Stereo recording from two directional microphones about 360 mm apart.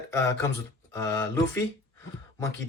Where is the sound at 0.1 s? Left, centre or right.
Centre.